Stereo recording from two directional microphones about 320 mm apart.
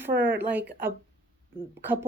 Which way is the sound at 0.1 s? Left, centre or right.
Right.